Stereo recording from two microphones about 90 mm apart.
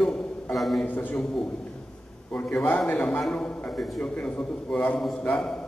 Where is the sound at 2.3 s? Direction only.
15° left (ahead or behind).